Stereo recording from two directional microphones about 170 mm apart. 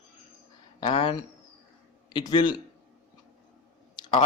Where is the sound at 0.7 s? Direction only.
30° left (ahead or behind).